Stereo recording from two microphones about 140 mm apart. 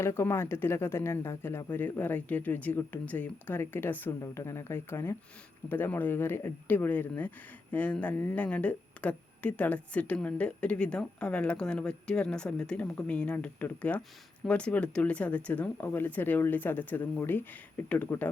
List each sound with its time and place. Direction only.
0.0 s speech: 20° left (ahead or behind)